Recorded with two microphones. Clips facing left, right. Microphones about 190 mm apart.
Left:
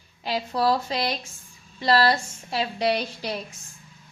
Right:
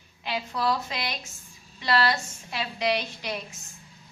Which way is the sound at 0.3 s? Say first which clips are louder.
Left 4 dB; 35° left (ahead or behind).